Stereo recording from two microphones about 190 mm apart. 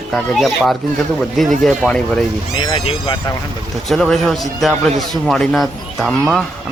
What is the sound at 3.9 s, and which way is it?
Speech, centre (ahead or behind).